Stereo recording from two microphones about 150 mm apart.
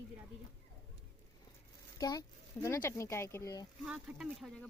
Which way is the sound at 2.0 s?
25° left (ahead or behind).